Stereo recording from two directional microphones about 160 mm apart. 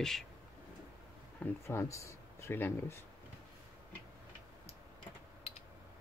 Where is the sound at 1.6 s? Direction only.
20° left (ahead or behind).